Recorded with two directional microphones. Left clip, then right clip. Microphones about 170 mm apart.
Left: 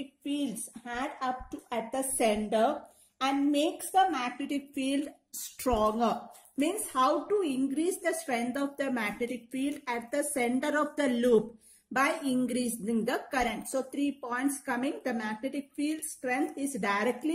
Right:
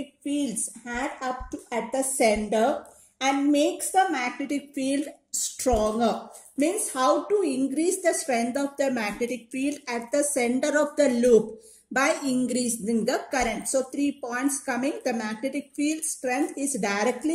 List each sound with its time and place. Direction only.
0.2 s a woman's voice: 40° left (ahead or behind)